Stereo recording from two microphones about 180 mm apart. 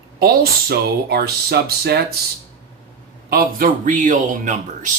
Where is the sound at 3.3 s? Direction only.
55° right (ahead or behind).